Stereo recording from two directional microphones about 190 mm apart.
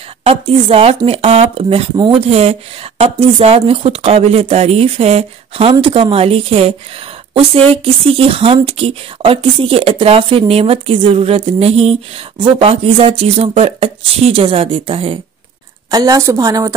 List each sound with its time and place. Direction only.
0.2 s speech: 30° right (ahead or behind)
15.9 s a woman's voice: 20° right (ahead or behind)